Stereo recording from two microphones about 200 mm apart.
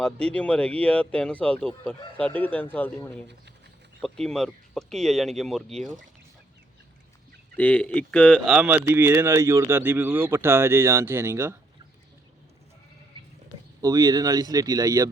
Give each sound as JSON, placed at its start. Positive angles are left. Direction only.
{"t": 0.0, "sound": "speech", "side_deg": 5}
{"t": 7.5, "sound": "speech", "side_deg": 10}
{"t": 8.5, "sound": "speech", "side_deg": -10}
{"t": 13.8, "sound": "speech", "side_deg": -20}